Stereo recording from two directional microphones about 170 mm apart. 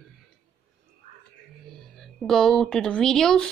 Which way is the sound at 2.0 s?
Centre (ahead or behind).